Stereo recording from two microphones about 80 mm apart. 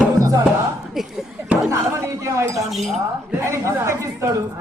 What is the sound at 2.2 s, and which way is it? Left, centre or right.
Speech, right.